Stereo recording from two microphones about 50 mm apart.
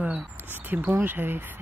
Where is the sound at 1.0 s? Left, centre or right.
Right.